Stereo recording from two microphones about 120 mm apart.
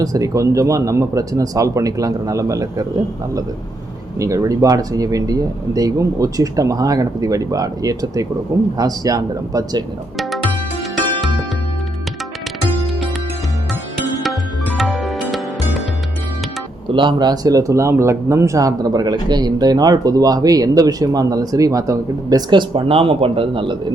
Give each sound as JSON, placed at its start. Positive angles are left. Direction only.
{"t": 0.0, "sound": "speech", "side_deg": -30}
{"t": 4.2, "sound": "speech", "side_deg": -30}
{"t": 14.8, "sound": "music", "side_deg": 0}
{"t": 16.9, "sound": "speech", "side_deg": -40}